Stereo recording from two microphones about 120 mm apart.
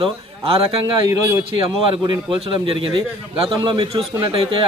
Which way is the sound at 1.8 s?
45° right (ahead or behind).